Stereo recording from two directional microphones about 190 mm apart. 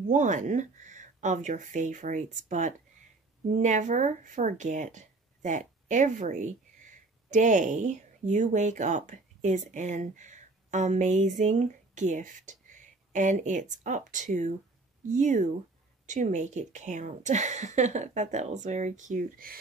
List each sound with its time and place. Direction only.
0.1 s a woman's voice: 40° right (ahead or behind)